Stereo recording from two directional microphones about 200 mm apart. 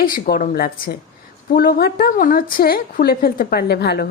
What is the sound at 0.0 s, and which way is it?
A woman's voice, 45° left (ahead or behind).